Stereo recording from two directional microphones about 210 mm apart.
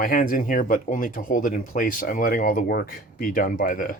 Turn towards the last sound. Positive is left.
turn(degrees=40)  # may be behind; listen again after turning